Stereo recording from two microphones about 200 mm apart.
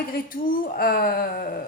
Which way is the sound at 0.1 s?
45° left (ahead or behind).